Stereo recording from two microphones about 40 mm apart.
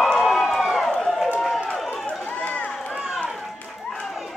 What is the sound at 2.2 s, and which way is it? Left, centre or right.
Run, left.